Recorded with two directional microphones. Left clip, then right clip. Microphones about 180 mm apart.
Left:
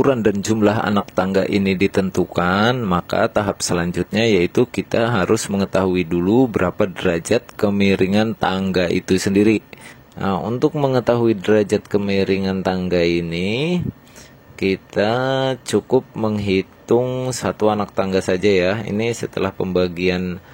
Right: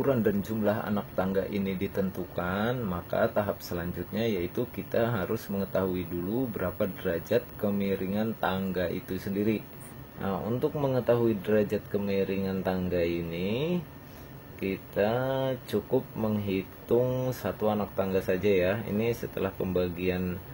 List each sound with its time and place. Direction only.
0.0 s speech: 45° left (ahead or behind)
17.0 s speech: 20° left (ahead or behind)
17.3 s speech: 35° left (ahead or behind)